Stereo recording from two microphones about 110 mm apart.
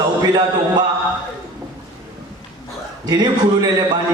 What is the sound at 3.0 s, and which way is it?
Speech, 40° right (ahead or behind).